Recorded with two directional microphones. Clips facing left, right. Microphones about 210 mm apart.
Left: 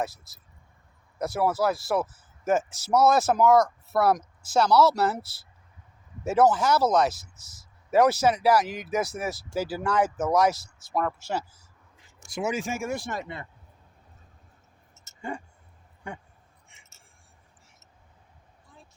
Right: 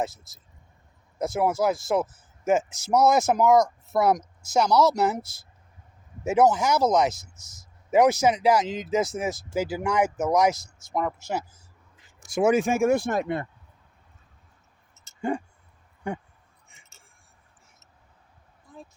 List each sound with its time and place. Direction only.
1.2 s speech: 20° right (ahead or behind)
6.2 s speech: 15° right (ahead or behind)
7.2 s speech: 45° right (ahead or behind)
7.9 s speech: 15° right (ahead or behind)
12.3 s speech: 55° right (ahead or behind)